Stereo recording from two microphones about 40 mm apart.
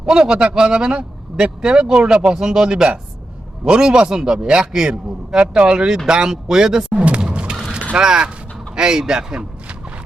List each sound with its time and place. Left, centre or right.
0.0 s speech: centre
7.0 s a sound: right
7.9 s a man's voice: centre